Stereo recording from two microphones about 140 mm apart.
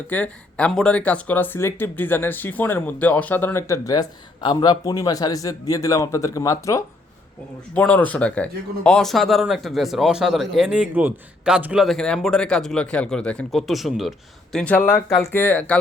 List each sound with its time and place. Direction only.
0.1 s speech: 10° left (ahead or behind)
7.7 s speech: 10° left (ahead or behind)
14.8 s speech: 20° left (ahead or behind)